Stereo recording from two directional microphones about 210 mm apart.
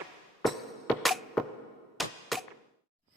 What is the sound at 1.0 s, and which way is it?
Music, centre (ahead or behind).